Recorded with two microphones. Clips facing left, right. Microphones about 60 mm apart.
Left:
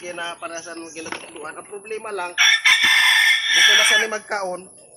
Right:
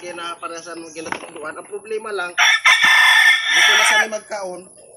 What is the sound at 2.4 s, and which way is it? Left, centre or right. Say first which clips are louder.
Chicken: right 3 dB; right.